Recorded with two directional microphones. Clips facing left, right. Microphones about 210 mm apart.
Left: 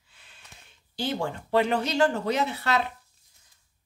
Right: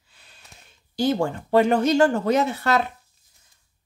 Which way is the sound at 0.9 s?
45° right (ahead or behind).